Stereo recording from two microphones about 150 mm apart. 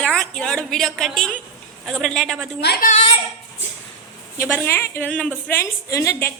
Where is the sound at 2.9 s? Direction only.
40° left (ahead or behind).